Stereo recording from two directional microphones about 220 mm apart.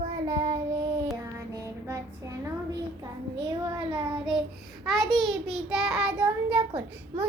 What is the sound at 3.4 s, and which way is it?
Speech, 20° right (ahead or behind).